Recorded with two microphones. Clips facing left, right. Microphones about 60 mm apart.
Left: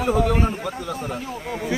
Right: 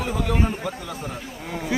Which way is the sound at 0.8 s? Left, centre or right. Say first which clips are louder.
Left 4 dB; centre.